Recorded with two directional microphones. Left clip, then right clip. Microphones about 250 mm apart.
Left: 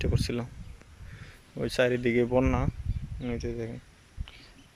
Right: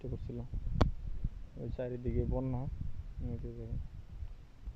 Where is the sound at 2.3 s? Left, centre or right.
Left.